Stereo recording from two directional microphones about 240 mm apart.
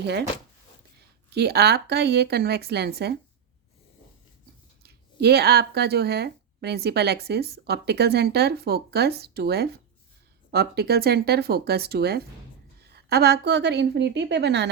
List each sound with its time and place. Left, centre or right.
0.0 s speech: right
1.3 s speech: right
4.8 s speech: right